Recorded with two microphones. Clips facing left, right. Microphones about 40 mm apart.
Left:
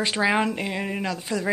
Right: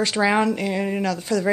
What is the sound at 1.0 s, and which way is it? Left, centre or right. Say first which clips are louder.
Speech: right 5 dB; left.